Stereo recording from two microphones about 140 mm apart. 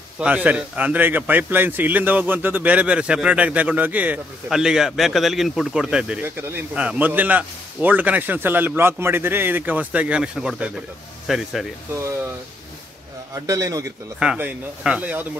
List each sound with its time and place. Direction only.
0.2 s a man's voice: 10° right (ahead or behind)
13.3 s a man's voice: 25° right (ahead or behind)
14.2 s a man's voice: 5° right (ahead or behind)